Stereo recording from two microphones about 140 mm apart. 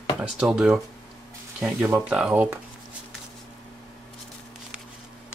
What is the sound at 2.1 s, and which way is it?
Speech, 5° right (ahead or behind).